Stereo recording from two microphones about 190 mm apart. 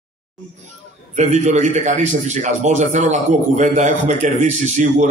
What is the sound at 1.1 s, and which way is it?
A man's voice, 35° right (ahead or behind).